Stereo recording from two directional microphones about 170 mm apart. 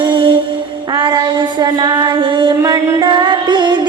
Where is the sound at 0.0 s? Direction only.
30° right (ahead or behind).